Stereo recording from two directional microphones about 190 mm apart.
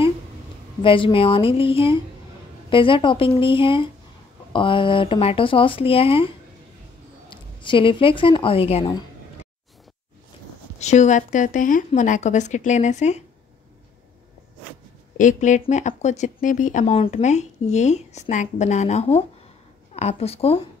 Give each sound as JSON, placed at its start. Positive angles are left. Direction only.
{"t": 0.8, "sound": "speech", "side_deg": 25}
{"t": 10.8, "sound": "speech", "side_deg": 35}
{"t": 15.1, "sound": "speech", "side_deg": 40}